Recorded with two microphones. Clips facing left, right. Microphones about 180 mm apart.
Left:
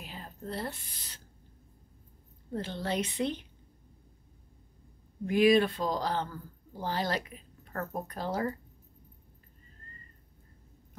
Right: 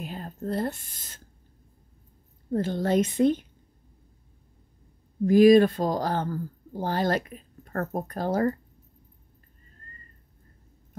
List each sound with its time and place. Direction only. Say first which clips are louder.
0.0 s a sound: right 9 dB; 45° right (ahead or behind)
2.5 s speech: right 9 dB; 45° right (ahead or behind)
5.2 s speech: right 8 dB; 40° right (ahead or behind)